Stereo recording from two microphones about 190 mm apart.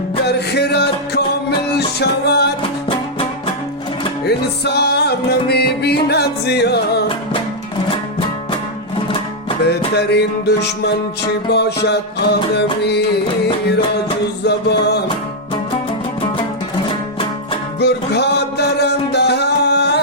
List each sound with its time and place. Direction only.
0.3 s music: 60° left (ahead or behind)
4.3 s music: 60° left (ahead or behind)
9.9 s music: 60° left (ahead or behind)
14.4 s music: 60° left (ahead or behind)
17.7 s music: 60° left (ahead or behind)